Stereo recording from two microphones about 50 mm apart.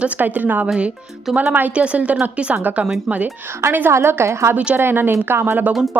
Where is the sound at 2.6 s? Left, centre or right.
Right.